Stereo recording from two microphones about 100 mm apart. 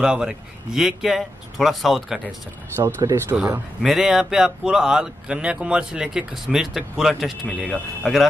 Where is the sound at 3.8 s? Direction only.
5° right (ahead or behind).